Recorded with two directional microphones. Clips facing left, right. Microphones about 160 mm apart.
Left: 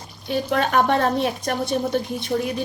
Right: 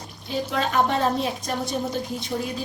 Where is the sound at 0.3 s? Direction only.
60° left (ahead or behind).